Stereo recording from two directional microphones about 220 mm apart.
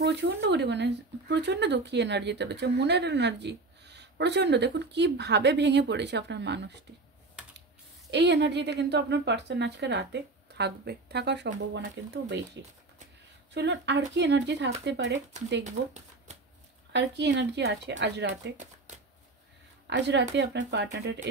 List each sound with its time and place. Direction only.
0.0 s speech: 50° right (ahead or behind)
8.1 s speech: 50° right (ahead or behind)
15.6 s speech: 30° right (ahead or behind)
16.9 s speech: 55° right (ahead or behind)
19.9 s speech: 55° right (ahead or behind)